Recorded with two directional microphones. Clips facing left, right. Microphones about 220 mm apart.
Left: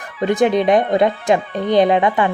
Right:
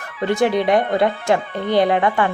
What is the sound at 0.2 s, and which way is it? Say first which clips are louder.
Speech: left 2 dB; 15° left (ahead or behind).